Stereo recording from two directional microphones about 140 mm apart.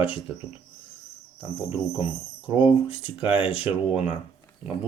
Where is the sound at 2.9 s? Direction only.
40° left (ahead or behind).